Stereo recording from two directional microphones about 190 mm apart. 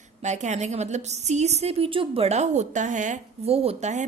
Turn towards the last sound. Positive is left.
turn(degrees=-35)  # may be behind; listen again after turning